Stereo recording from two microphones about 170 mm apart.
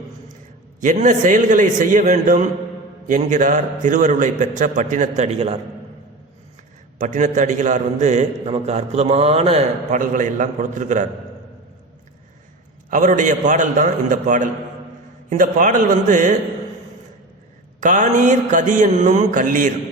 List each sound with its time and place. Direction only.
0.8 s a man's voice: 45° right (ahead or behind)
7.0 s a man's voice: 45° right (ahead or behind)
12.9 s a man's voice: 50° right (ahead or behind)
17.7 s a man's voice: 50° right (ahead or behind)